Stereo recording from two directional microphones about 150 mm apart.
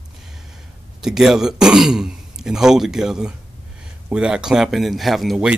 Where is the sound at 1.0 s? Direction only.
5° right (ahead or behind).